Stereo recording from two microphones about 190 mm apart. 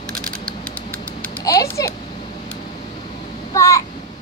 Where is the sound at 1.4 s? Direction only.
15° left (ahead or behind).